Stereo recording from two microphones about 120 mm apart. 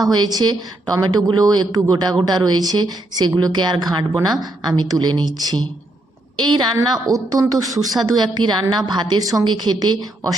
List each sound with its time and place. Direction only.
0.0 s a woman's voice: 35° right (ahead or behind)